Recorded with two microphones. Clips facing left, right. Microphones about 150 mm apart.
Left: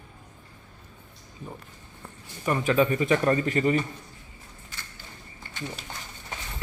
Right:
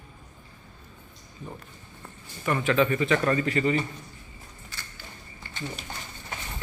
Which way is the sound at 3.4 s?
40° left (ahead or behind).